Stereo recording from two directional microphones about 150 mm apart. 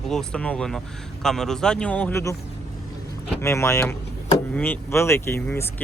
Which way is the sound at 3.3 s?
15° left (ahead or behind).